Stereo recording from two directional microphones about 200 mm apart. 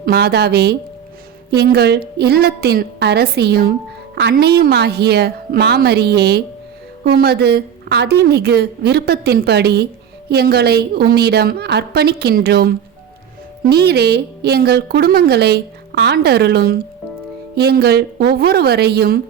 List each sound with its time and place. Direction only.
0.0 s a woman's voice: 50° right (ahead or behind)